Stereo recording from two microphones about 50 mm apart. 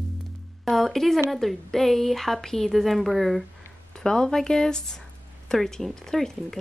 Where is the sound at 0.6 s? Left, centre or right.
Centre.